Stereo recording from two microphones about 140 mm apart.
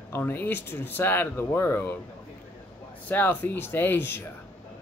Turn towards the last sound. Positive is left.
turn(degrees=15)  # may be behind; listen again after turning